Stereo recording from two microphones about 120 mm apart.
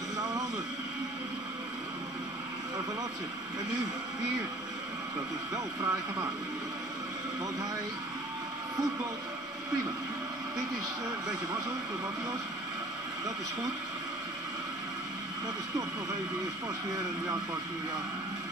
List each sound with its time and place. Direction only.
5.5 s speech: 30° right (ahead or behind)